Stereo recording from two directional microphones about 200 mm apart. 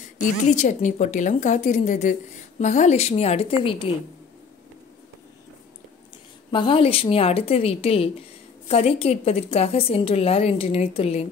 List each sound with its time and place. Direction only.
0.2 s a woman's voice: 40° left (ahead or behind)
6.5 s a woman's voice: 25° left (ahead or behind)